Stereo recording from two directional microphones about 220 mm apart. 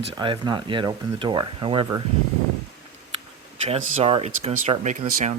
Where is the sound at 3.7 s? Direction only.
30° right (ahead or behind).